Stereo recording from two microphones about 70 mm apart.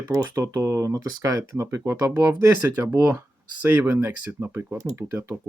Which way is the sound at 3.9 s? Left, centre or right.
Right.